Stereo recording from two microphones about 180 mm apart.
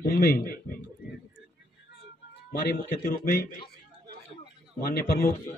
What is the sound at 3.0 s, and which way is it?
Speech, 50° left (ahead or behind).